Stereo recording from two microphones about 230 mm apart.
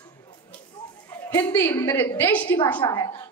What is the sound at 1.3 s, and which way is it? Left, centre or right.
A woman's voice, centre.